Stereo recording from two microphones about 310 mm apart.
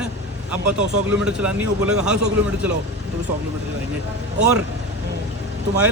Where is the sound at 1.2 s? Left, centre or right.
Centre.